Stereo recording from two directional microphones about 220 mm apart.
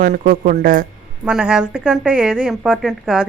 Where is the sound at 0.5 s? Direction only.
40° right (ahead or behind).